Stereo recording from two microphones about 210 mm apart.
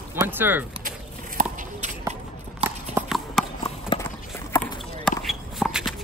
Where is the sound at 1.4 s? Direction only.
35° right (ahead or behind).